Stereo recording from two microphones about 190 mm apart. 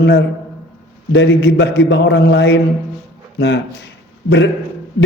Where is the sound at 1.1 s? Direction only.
70° left (ahead or behind).